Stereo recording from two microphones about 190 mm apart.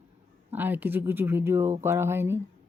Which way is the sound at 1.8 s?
15° right (ahead or behind).